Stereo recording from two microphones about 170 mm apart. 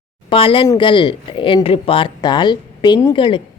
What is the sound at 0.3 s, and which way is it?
Speech, 30° left (ahead or behind).